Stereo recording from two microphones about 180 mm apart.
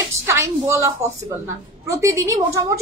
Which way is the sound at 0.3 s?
15° right (ahead or behind).